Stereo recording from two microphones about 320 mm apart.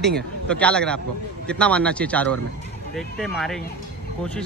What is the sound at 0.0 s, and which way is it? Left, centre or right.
Speech, centre.